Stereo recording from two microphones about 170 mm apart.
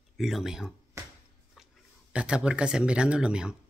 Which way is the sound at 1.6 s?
Centre (ahead or behind).